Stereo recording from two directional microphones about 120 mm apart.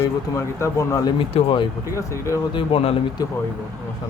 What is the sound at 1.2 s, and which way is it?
Speech, 45° left (ahead or behind).